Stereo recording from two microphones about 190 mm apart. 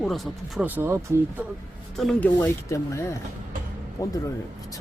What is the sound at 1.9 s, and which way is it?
Speech, centre (ahead or behind).